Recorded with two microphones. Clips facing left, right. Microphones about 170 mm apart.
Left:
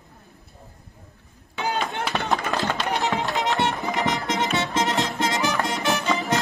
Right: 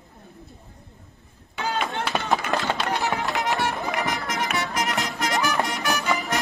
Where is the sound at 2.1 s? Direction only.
Centre (ahead or behind).